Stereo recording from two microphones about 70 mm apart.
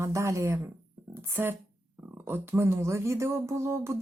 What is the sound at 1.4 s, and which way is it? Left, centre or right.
A woman's voice, right.